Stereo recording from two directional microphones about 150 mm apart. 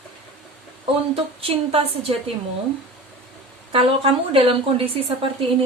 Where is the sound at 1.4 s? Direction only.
40° right (ahead or behind).